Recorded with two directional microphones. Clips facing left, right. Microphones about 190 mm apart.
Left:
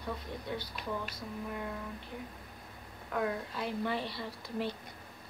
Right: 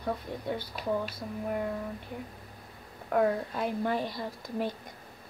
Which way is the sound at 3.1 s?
50° right (ahead or behind).